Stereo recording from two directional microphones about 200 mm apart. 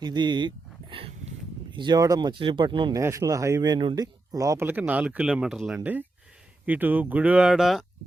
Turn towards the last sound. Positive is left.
turn(degrees=0)  # may be behind; listen again after turning